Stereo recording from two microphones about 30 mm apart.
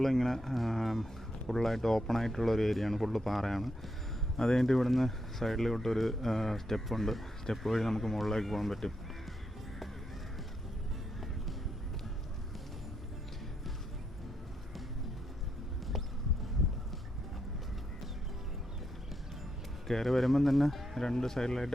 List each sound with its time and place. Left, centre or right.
0.0 s speech: centre
4.4 s speech: centre
19.9 s speech: centre
21.0 s speech: centre